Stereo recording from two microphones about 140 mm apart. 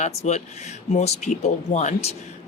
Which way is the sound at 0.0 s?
55° left (ahead or behind).